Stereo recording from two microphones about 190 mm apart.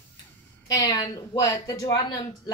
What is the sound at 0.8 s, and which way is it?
A woman's voice, 20° left (ahead or behind).